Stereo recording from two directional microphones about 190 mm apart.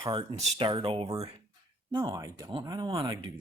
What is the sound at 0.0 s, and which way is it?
Speech, 25° right (ahead or behind).